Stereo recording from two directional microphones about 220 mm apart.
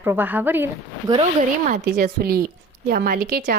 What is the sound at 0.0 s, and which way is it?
A woman's voice, 10° right (ahead or behind).